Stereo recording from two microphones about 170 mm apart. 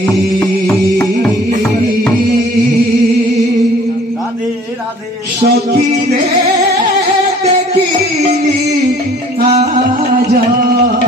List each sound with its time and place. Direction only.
0.0 s music: 15° left (ahead or behind)
5.4 s music: 70° right (ahead or behind)